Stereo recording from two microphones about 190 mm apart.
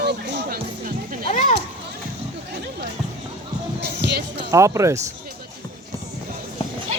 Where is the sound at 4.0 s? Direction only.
60° right (ahead or behind).